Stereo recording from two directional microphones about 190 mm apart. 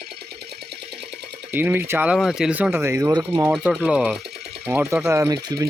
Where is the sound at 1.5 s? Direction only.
10° right (ahead or behind).